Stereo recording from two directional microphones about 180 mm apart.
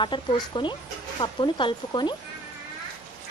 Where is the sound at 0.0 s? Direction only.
25° left (ahead or behind).